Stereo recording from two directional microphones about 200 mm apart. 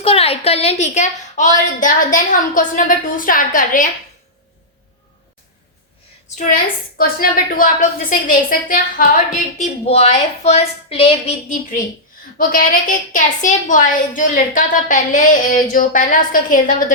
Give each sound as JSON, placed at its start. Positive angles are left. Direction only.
{"t": 0.0, "sound": "a woman's voice", "side_deg": 30}
{"t": 6.3, "sound": "a woman's voice", "side_deg": 35}
{"t": 6.9, "sound": "a woman's voice", "side_deg": 45}
{"t": 9.6, "sound": "a woman's voice", "side_deg": 30}
{"t": 12.4, "sound": "a woman's voice", "side_deg": 45}